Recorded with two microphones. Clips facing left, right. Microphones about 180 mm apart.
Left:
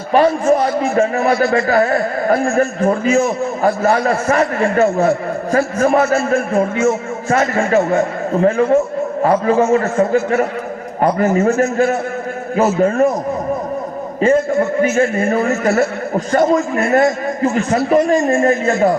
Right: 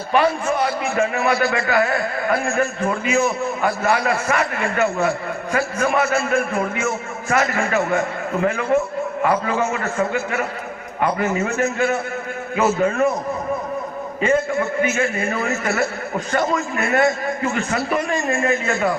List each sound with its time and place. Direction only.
0.1 s a man's voice: 35° left (ahead or behind)
14.2 s a man's voice: 35° left (ahead or behind)